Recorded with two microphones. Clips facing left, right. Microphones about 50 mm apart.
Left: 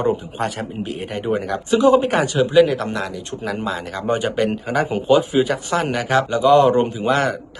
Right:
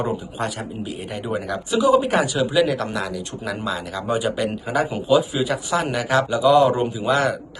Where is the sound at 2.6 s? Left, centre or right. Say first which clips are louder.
Left 6 dB; left.